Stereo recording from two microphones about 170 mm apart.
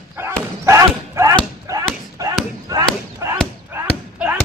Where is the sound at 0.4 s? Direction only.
15° right (ahead or behind).